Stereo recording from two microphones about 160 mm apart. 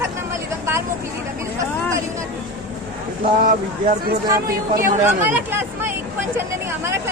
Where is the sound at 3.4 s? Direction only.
60° right (ahead or behind).